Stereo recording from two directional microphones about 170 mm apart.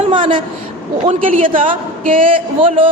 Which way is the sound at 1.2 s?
50° right (ahead or behind).